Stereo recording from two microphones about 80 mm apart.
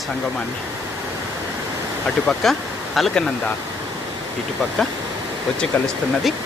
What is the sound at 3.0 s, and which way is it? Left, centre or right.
Speech, centre.